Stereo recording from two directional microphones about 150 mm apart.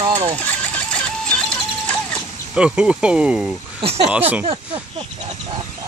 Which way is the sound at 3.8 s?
40° right (ahead or behind).